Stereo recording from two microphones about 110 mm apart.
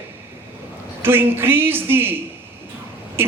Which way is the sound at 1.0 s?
20° right (ahead or behind).